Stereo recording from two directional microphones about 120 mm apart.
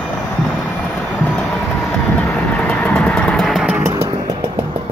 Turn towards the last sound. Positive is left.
turn(degrees=0)  # may be behind; listen again after turning